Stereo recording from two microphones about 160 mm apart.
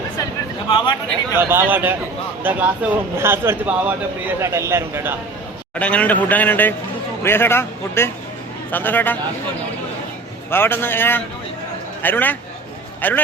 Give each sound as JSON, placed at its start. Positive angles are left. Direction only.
{"t": 0.7, "sound": "a man's voice", "side_deg": 25}
{"t": 1.4, "sound": "speech", "side_deg": -15}
{"t": 5.8, "sound": "a man's voice", "side_deg": 10}
{"t": 10.5, "sound": "a man's voice", "side_deg": 15}